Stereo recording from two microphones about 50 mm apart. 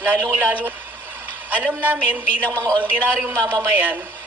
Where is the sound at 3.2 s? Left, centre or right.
Right.